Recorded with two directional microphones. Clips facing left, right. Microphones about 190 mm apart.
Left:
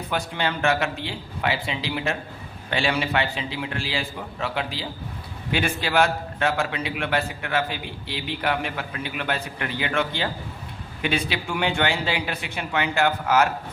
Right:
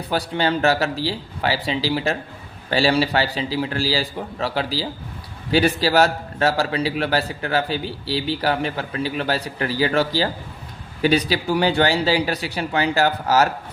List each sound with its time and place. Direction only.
0.1 s a man's voice: 35° right (ahead or behind)